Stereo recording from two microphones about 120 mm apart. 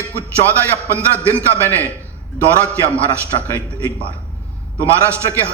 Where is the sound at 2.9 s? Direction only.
20° right (ahead or behind).